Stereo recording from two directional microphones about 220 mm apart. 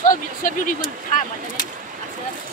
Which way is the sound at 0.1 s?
35° left (ahead or behind).